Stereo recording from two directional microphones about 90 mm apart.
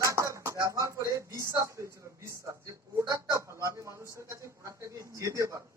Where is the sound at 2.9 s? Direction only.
35° right (ahead or behind).